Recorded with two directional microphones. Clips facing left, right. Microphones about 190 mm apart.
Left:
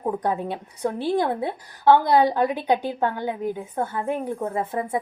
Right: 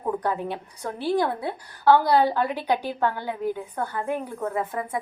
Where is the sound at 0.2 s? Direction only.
20° left (ahead or behind).